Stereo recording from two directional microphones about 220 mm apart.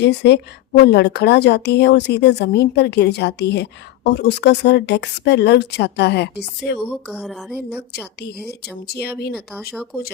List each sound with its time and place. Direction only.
0.0 s a woman's voice: 50° left (ahead or behind)
7.1 s speech: 5° right (ahead or behind)
8.2 s a woman's voice: 45° left (ahead or behind)
9.3 s speech: centre (ahead or behind)